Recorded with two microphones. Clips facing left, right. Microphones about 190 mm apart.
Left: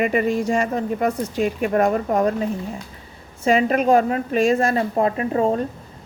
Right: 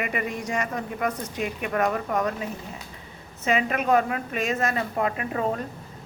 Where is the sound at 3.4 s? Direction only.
35° left (ahead or behind).